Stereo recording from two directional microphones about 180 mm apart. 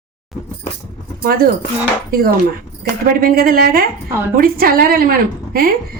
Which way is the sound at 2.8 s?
55° right (ahead or behind).